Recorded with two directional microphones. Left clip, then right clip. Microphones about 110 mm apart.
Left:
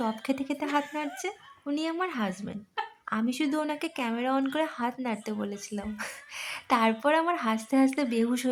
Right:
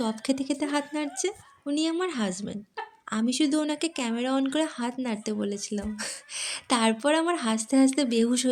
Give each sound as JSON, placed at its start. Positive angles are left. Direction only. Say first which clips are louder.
{"t": 0.0, "sound": "a woman's voice", "louder": "right 2 dB", "side_deg": -30}